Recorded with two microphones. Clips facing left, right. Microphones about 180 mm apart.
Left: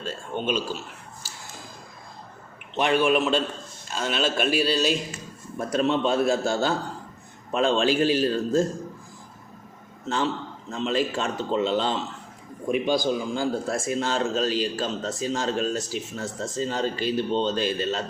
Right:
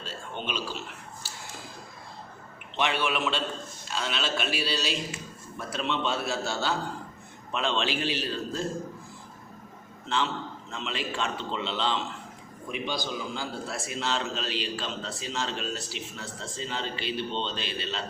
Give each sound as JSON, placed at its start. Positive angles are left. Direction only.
{"t": 0.0, "sound": "a sound", "side_deg": 45}
{"t": 2.7, "sound": "a man's voice", "side_deg": 45}
{"t": 10.7, "sound": "a man's voice", "side_deg": 40}